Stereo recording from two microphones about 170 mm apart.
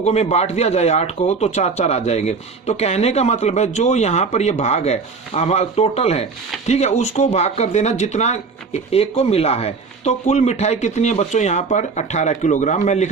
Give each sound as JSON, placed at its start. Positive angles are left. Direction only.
{"t": 0.0, "sound": "speech", "side_deg": 40}